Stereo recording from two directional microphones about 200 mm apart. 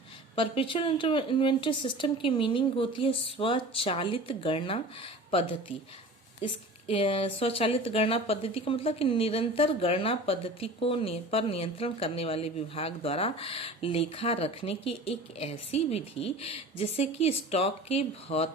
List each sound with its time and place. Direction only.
0.3 s a woman's voice: 25° left (ahead or behind)